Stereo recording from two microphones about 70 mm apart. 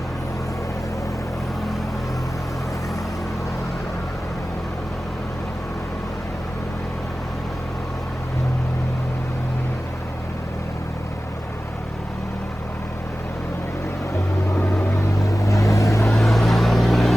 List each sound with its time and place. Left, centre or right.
15.2 s vehicle: left
16.0 s vehicle: centre